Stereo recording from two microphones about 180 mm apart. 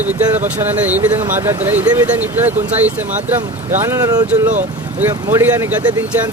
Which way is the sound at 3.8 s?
15° right (ahead or behind).